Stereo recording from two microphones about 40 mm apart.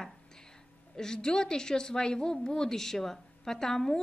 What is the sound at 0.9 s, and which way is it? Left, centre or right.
A woman's voice, centre.